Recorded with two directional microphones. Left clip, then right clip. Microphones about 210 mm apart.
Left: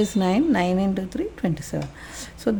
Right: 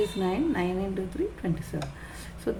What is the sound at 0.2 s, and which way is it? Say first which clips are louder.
Speech: left 6 dB; 50° left (ahead or behind).